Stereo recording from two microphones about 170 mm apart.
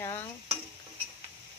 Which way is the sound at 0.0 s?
15° left (ahead or behind).